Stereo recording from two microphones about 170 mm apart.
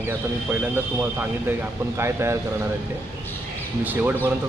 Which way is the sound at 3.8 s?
10° right (ahead or behind).